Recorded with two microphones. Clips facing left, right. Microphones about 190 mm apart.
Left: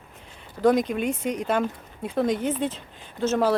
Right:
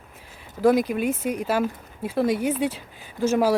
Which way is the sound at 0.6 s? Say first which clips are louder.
Right 1 dB; 5° right (ahead or behind).